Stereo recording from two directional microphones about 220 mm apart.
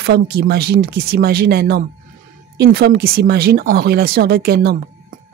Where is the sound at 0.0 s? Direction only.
45° right (ahead or behind).